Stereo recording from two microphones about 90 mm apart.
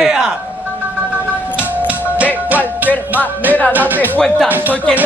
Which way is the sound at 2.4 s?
20° right (ahead or behind).